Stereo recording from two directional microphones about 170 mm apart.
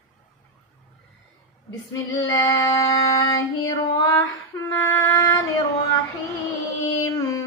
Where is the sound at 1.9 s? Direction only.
20° left (ahead or behind).